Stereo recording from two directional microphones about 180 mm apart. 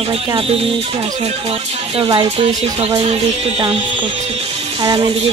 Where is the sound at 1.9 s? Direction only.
30° right (ahead or behind).